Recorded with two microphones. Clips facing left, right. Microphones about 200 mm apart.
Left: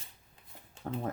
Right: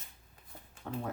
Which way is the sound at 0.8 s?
40° left (ahead or behind).